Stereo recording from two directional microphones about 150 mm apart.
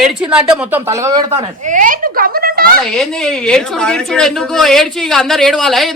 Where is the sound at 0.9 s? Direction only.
20° right (ahead or behind).